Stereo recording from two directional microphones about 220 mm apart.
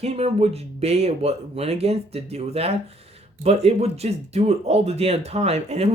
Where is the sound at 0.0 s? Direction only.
30° right (ahead or behind).